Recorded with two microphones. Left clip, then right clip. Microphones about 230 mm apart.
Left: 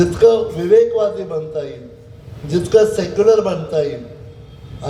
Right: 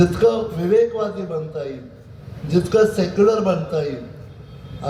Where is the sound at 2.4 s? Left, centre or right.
Left.